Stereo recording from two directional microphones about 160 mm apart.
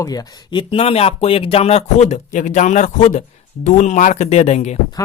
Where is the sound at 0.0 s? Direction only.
25° left (ahead or behind); by 4.8 s 45° left (ahead or behind).